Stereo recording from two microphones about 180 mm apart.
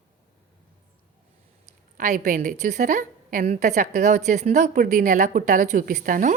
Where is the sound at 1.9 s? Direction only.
45° right (ahead or behind).